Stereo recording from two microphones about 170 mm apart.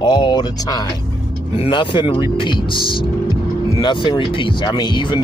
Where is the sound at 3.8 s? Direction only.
25° left (ahead or behind).